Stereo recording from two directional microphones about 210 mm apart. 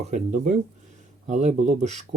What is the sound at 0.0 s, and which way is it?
Speech, 35° right (ahead or behind).